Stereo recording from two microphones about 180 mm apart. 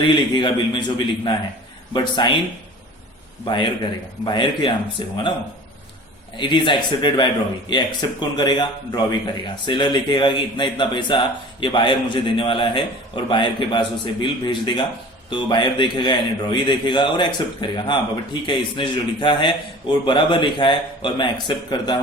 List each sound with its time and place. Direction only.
0.1 s a man's voice: 25° left (ahead or behind)
3.4 s a man's voice: 25° left (ahead or behind)
6.3 s a man's voice: 25° left (ahead or behind)